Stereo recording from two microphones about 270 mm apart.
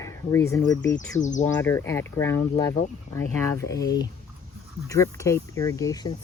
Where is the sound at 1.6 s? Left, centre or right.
Centre.